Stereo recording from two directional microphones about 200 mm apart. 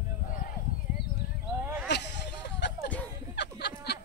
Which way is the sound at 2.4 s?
60° left (ahead or behind).